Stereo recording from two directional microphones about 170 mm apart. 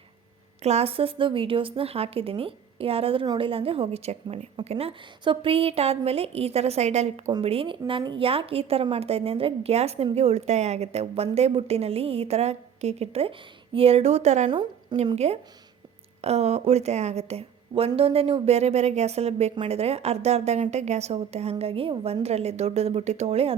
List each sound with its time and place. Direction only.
0.6 s a woman's voice: 40° right (ahead or behind)
14.5 s a woman's voice: 25° right (ahead or behind)
14.9 s a woman's voice: 40° right (ahead or behind)